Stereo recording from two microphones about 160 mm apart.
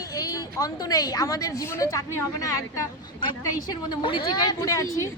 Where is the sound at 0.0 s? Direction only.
20° left (ahead or behind).